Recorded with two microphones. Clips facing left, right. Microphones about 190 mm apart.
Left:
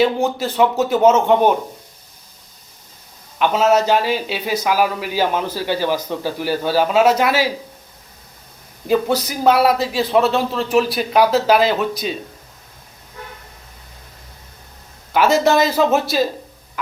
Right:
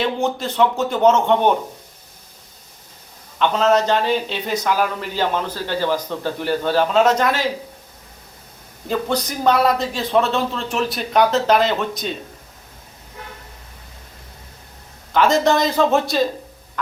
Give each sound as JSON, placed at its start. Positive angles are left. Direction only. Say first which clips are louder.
{"t": 0.0, "sound": "a man's voice", "louder": "left 4 dB", "side_deg": 5}
{"t": 3.3, "sound": "a man's voice", "louder": "left 1 dB", "side_deg": 5}
{"t": 8.9, "sound": "a man's voice", "louder": "left 4 dB", "side_deg": 5}
{"t": 15.1, "sound": "a man's voice", "louder": "left 1 dB", "side_deg": 5}